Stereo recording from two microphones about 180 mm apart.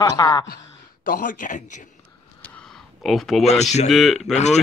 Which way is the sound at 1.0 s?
50° left (ahead or behind).